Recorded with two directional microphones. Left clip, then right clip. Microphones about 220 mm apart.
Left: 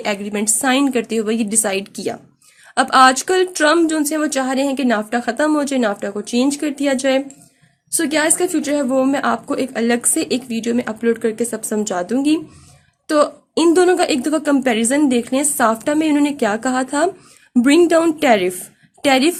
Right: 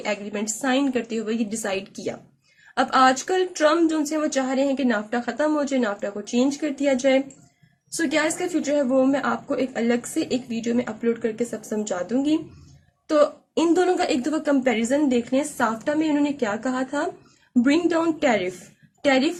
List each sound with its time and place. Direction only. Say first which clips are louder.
0.0 s a woman's voice: left 6 dB; 45° left (ahead or behind)